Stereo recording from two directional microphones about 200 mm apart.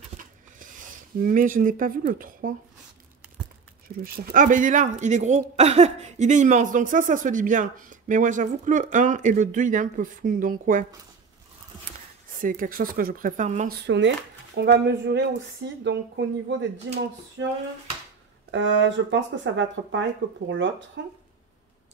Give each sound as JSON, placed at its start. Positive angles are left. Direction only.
{"t": 1.1, "sound": "speech", "side_deg": -40}
{"t": 4.0, "sound": "speech", "side_deg": -45}
{"t": 12.4, "sound": "speech", "side_deg": -45}
{"t": 13.8, "sound": "speech", "side_deg": -60}
{"t": 18.5, "sound": "speech", "side_deg": -65}